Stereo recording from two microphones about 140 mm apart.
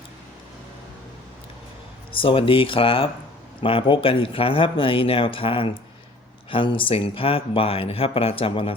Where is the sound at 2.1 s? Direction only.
40° left (ahead or behind).